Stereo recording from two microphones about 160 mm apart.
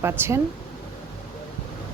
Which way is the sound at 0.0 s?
15° right (ahead or behind).